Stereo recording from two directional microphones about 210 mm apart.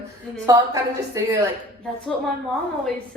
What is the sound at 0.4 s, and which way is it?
A woman's voice, 15° right (ahead or behind).